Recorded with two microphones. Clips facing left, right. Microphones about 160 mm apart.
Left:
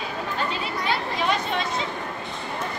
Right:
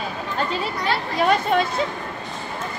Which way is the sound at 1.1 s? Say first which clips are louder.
Right 11 dB; 50° right (ahead or behind).